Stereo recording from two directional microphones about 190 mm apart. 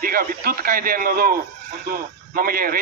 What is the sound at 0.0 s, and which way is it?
A man's voice, 50° right (ahead or behind).